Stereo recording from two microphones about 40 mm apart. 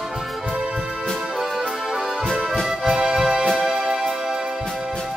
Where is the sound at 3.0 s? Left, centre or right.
Centre.